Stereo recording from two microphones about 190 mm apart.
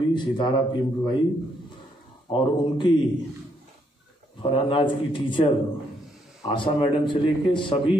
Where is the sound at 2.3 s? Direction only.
25° left (ahead or behind).